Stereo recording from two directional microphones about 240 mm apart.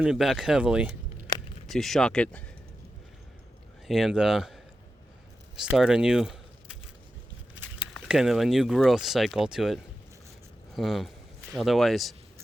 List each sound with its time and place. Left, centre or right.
0.0 s speech: centre
1.3 s a sound: centre
1.7 s speech: centre
3.8 s speech: centre
7.9 s speech: centre